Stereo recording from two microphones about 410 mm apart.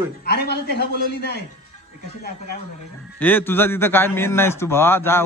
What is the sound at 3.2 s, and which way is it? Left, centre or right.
A man's voice, centre.